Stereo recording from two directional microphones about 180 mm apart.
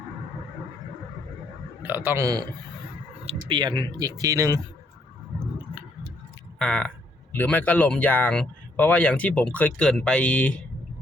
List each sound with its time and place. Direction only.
1.9 s speech: 10° right (ahead or behind)
6.6 s speech: 5° left (ahead or behind)